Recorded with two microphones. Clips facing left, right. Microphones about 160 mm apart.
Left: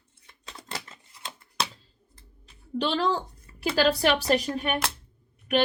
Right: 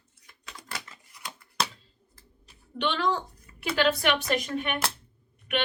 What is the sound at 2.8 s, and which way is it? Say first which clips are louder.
A woman's voice: left 2 dB; 35° left (ahead or behind).